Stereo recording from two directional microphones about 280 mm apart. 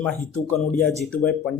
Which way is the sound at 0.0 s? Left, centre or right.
Centre.